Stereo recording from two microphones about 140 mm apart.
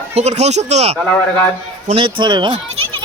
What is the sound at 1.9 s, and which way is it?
Speech, 35° right (ahead or behind).